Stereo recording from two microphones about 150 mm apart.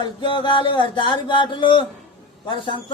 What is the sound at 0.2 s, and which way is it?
Speech, 35° left (ahead or behind).